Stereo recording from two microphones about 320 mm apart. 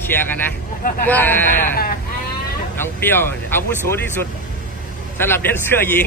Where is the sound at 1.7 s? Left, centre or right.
Left.